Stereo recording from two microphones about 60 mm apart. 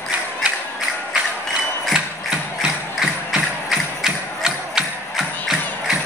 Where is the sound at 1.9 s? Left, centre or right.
Centre.